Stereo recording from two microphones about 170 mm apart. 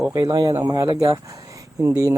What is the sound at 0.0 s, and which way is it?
Speech, 20° right (ahead or behind).